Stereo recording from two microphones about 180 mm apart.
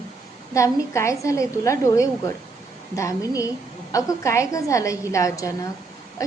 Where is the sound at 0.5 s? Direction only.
15° left (ahead or behind).